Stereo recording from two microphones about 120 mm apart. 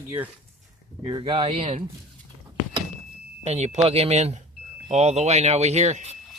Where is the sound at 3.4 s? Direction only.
65° right (ahead or behind).